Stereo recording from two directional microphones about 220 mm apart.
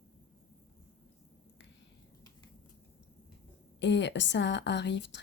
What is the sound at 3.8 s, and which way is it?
Speech, 50° left (ahead or behind).